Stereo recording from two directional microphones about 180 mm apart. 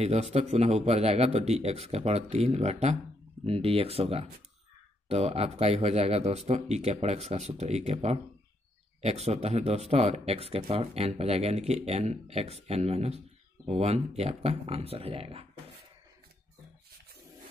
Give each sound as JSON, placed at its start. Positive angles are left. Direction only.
{"t": 0.0, "sound": "speech", "side_deg": -35}